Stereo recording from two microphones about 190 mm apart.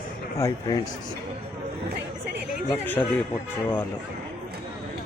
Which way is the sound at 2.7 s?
10° left (ahead or behind).